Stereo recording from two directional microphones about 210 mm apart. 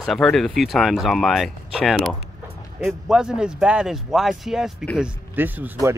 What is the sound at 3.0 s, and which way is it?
Speech, 5° right (ahead or behind).